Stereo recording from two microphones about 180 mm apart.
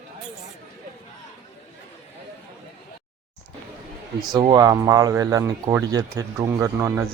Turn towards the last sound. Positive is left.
turn(degrees=-15)  # may be behind; listen again after turning